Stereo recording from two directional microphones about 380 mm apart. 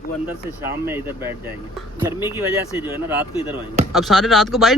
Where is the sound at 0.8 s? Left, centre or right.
Centre.